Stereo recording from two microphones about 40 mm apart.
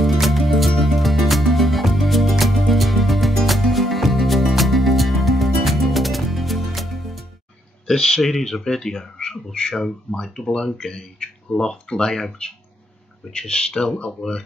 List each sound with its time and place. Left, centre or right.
0.0 s music: centre
7.8 s a sound: centre
8.2 s speech: centre
13.3 s speech: left